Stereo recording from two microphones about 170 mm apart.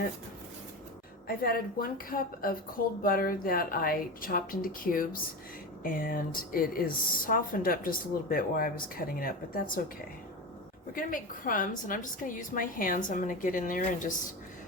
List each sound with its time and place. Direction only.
1.3 s speech: 60° left (ahead or behind)
10.9 s a woman's voice: 55° left (ahead or behind)